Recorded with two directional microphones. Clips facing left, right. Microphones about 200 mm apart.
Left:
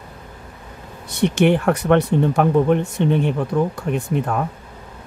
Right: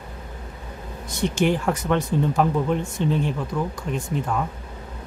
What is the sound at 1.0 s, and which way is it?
Speech, 65° left (ahead or behind).